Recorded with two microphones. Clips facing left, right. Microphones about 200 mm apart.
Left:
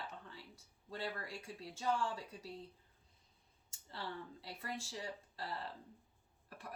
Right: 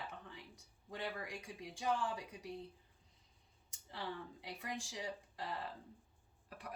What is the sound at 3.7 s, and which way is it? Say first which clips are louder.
A woman's voice: right 1 dB; 15° right (ahead or behind).